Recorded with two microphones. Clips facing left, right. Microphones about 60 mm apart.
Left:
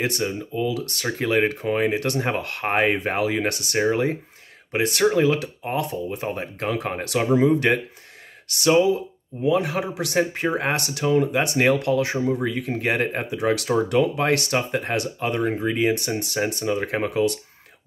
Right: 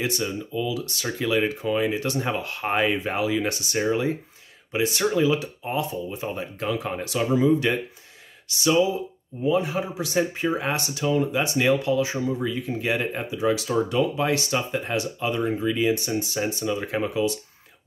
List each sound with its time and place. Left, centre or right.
0.0 s speech: left
9.4 s speech: left